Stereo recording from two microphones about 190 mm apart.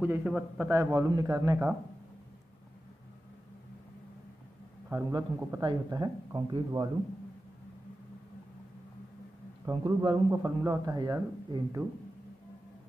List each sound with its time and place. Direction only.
0.0 s a man's voice: 5° right (ahead or behind)
0.7 s speech: 15° right (ahead or behind)
5.1 s speech: 20° right (ahead or behind)
9.7 s speech: 20° right (ahead or behind)